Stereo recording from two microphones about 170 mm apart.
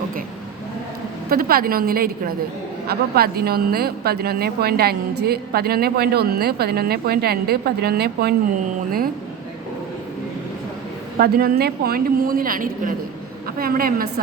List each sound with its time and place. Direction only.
1.3 s a woman's voice: 60° right (ahead or behind)
11.2 s a woman's voice: 60° right (ahead or behind)